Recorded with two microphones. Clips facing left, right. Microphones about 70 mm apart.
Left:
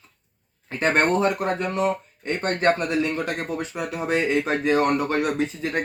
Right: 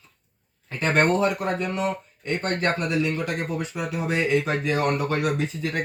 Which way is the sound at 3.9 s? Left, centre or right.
Left.